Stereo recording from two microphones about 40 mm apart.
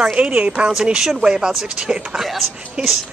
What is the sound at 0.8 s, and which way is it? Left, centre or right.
Speech, centre.